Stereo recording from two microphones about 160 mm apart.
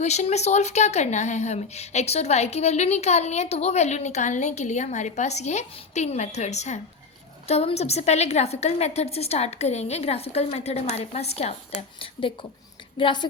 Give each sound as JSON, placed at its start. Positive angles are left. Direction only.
{"t": 0.0, "sound": "a woman's voice", "side_deg": 45}